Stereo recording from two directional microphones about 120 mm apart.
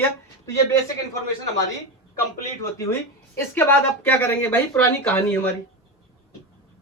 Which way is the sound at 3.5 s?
15° left (ahead or behind).